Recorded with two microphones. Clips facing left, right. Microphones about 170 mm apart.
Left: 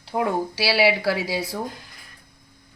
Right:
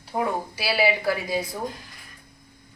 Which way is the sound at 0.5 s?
80° left.